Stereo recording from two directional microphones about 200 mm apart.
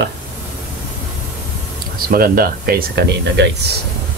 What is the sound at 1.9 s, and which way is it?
Speech, 45° right (ahead or behind).